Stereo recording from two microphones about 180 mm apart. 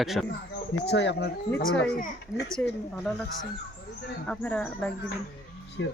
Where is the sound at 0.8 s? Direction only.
75° left (ahead or behind).